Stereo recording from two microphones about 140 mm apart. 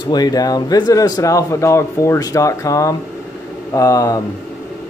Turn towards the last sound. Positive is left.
turn(degrees=25)  # may be behind; listen again after turning